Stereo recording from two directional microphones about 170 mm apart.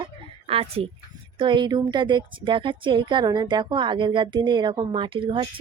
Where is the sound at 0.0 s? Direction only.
35° right (ahead or behind).